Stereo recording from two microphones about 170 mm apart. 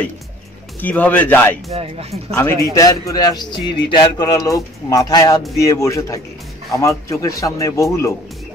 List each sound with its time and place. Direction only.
0.7 s speech: 10° left (ahead or behind)
1.7 s speech: 35° right (ahead or behind)
2.7 s speech: 20° left (ahead or behind)